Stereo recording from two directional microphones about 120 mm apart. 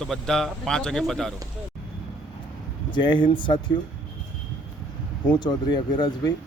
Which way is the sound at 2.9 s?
40° left (ahead or behind).